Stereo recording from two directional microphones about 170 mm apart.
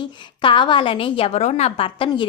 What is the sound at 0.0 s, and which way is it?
A woman's voice, 30° left (ahead or behind).